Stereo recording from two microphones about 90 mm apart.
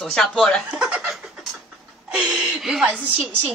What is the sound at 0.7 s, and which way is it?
Speech, 10° right (ahead or behind).